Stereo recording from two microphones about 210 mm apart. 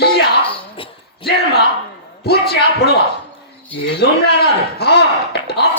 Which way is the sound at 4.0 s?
50° left (ahead or behind).